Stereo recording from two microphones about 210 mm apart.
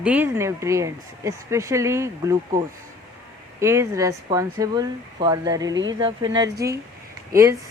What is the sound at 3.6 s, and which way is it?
Speech, 15° right (ahead or behind).